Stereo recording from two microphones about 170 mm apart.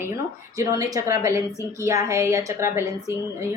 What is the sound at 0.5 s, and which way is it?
A woman's voice, 20° right (ahead or behind).